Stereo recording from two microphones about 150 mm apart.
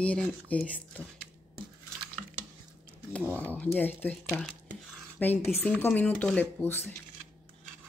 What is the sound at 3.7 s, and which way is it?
Speech, 10° left (ahead or behind).